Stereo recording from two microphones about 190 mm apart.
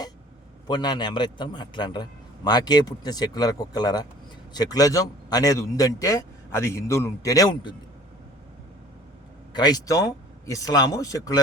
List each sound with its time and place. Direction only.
0.7 s a man's voice: 20° left (ahead or behind)
9.5 s a man's voice: 20° left (ahead or behind)